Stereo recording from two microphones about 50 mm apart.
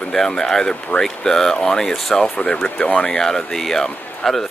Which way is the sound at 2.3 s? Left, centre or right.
Left.